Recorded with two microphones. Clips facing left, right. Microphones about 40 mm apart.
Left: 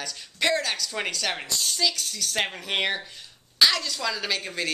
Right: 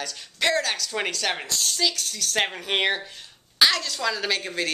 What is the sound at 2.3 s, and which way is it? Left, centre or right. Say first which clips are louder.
A child's voice: right 3 dB; centre.